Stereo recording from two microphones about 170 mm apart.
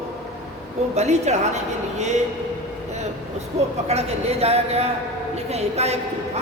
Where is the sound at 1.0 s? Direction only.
40° right (ahead or behind).